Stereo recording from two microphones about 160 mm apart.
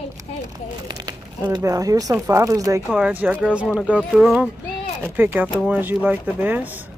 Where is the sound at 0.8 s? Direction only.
25° right (ahead or behind).